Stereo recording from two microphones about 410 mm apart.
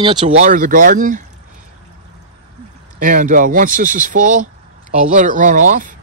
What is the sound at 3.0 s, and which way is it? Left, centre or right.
Speech, centre.